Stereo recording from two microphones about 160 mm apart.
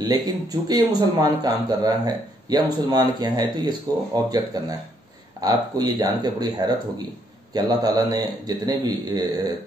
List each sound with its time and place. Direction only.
0.5 s speech: 25° right (ahead or behind)